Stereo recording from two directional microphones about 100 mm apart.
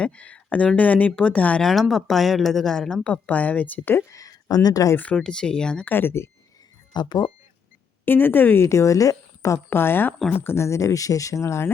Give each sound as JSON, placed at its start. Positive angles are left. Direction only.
{"t": 0.0, "sound": "speech", "side_deg": 10}
{"t": 1.6, "sound": "speech", "side_deg": 0}
{"t": 4.1, "sound": "speech", "side_deg": 35}
{"t": 4.9, "sound": "speech", "side_deg": 10}
{"t": 6.9, "sound": "speech", "side_deg": 45}
{"t": 8.0, "sound": "a woman's voice", "side_deg": 20}